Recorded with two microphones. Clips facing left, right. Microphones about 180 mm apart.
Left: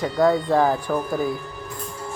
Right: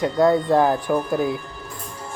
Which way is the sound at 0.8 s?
15° right (ahead or behind).